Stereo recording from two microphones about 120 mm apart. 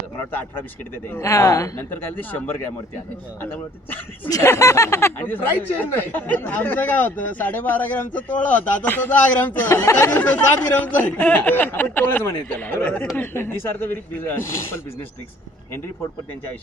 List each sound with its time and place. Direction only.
0.3 s a man's voice: 15° left (ahead or behind)
1.1 s speech: 25° left (ahead or behind)
1.9 s a man's voice: 15° left (ahead or behind)